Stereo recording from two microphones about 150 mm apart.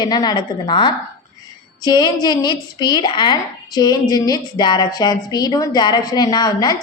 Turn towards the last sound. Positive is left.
turn(degrees=25)  # may be behind; listen again after turning